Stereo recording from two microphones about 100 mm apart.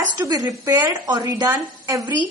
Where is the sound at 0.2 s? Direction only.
40° right (ahead or behind).